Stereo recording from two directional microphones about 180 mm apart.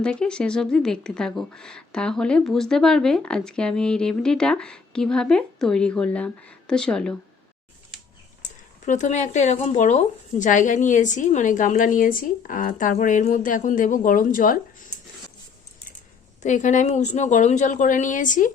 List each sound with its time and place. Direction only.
0.0 s speech: 5° left (ahead or behind)
8.9 s speech: 40° left (ahead or behind)
16.4 s speech: 40° left (ahead or behind)